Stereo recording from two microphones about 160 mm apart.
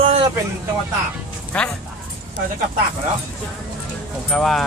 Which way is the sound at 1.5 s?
10° left (ahead or behind).